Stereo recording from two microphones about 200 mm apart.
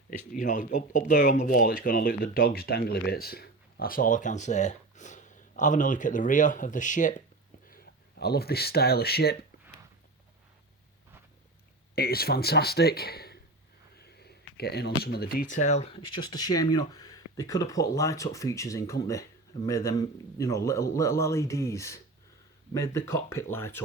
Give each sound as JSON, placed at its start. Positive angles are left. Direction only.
{"t": 0.1, "sound": "speech", "side_deg": 40}
{"t": 11.9, "sound": "speech", "side_deg": 50}